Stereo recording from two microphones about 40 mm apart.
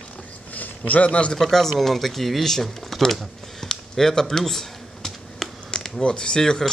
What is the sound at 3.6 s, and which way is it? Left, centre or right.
Computer keyboard, centre.